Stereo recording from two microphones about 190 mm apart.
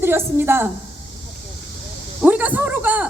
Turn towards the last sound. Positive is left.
turn(degrees=-10)  # may be behind; listen again after turning